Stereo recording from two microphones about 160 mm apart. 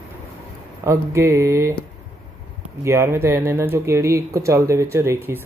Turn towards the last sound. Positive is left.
turn(degrees=-15)  # may be behind; listen again after turning